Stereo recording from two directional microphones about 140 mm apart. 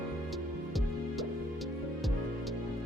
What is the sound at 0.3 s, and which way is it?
Music, centre (ahead or behind).